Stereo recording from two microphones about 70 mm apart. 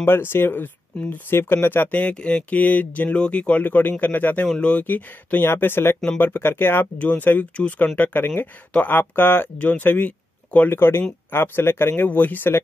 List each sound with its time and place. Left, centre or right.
0.0 s speech: left
0.9 s speech: centre
1.3 s speech: left
4.6 s speech: centre
4.8 s speech: left
10.7 s speech: left